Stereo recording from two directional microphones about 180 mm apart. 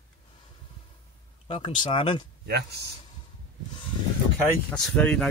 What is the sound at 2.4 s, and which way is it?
Speech, 65° right (ahead or behind).